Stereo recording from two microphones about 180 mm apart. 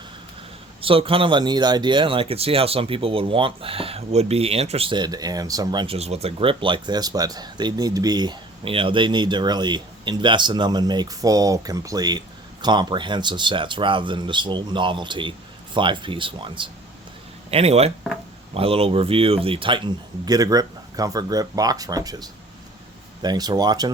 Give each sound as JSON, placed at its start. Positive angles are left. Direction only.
{"t": 0.8, "sound": "speech", "side_deg": -30}